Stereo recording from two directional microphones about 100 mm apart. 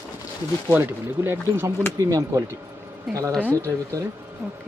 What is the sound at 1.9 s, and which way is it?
Speech, 35° right (ahead or behind).